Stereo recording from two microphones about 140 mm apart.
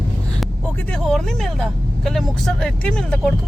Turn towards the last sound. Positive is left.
turn(degrees=5)  # may be behind; listen again after turning